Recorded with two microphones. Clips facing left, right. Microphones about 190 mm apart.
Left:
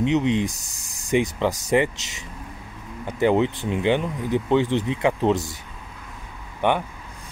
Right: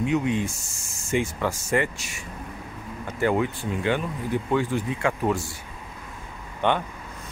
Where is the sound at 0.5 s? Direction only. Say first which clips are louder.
Left 1 dB; 35° left (ahead or behind).